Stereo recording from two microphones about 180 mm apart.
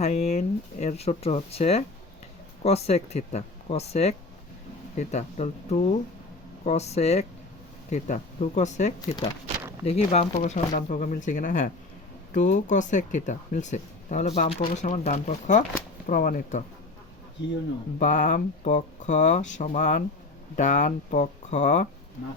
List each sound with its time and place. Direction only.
0.0 s speech: 40° left (ahead or behind)
18.0 s speech: 45° left (ahead or behind)